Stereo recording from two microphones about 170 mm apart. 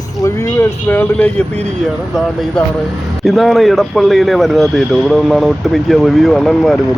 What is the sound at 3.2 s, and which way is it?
A man's voice, centre (ahead or behind).